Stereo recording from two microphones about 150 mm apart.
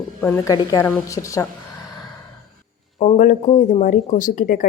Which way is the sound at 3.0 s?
55° left (ahead or behind).